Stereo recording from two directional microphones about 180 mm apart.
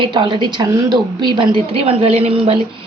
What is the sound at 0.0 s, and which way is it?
A woman's voice, 25° right (ahead or behind).